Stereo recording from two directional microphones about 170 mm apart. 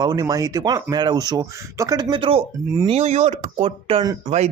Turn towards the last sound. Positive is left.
turn(degrees=-35)  # may be behind; listen again after turning